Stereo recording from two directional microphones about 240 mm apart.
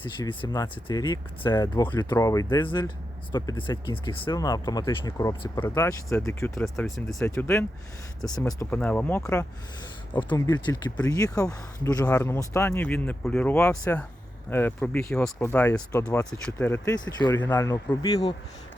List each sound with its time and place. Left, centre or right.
0.0 s speech: centre